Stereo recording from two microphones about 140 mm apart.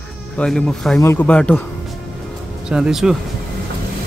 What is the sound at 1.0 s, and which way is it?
Cricket, 15° left (ahead or behind).